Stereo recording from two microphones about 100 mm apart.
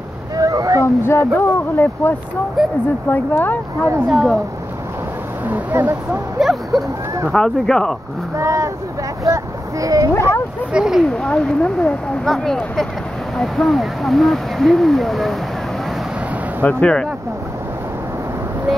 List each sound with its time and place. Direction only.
0.4 s a sound: 35° right (ahead or behind)
0.8 s speech: 25° left (ahead or behind)
2.6 s speech: centre (ahead or behind)
3.1 s speech: 20° left (ahead or behind)
4.1 s speech: centre (ahead or behind)
5.5 s speech: 20° right (ahead or behind)
6.4 s speech: centre (ahead or behind)
8.4 s speech: 30° right (ahead or behind)
10.7 s speech: 5° right (ahead or behind)
11.1 s speech: 10° left (ahead or behind)
16.6 s speech: 10° left (ahead or behind)